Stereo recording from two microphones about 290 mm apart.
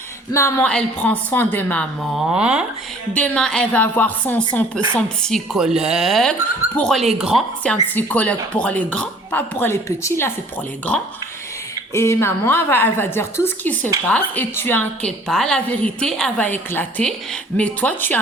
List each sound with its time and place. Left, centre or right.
0.3 s a woman's voice: centre